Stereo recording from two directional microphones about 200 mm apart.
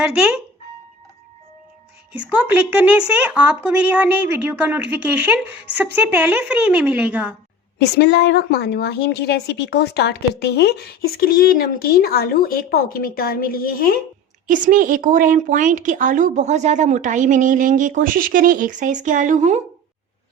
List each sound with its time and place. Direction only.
2.3 s a woman's voice: 5° right (ahead or behind)
7.8 s a woman's voice: 55° left (ahead or behind)
14.4 s a woman's voice: 40° right (ahead or behind)